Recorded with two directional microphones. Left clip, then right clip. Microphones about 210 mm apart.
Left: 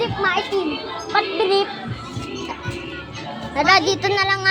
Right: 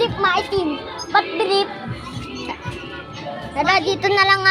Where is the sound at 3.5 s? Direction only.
5° left (ahead or behind).